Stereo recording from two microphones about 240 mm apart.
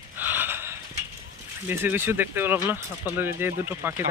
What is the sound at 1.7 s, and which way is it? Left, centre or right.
Speech, centre.